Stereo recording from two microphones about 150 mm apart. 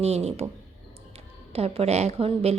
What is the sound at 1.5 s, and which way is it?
A woman's voice, 40° right (ahead or behind).